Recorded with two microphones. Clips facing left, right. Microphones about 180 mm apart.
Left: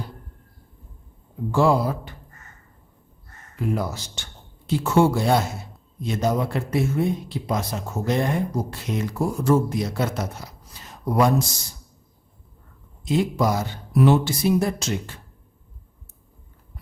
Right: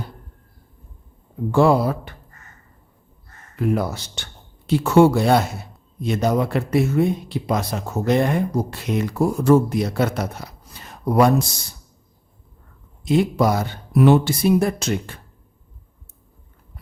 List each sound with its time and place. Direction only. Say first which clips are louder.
1.5 s speech: right 3 dB; 60° right (ahead or behind)
3.6 s speech: right 4 dB; 65° right (ahead or behind)
13.1 s speech: right 4 dB; 60° right (ahead or behind)